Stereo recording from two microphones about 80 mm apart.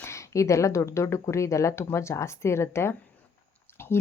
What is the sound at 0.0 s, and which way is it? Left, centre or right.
Speech, left.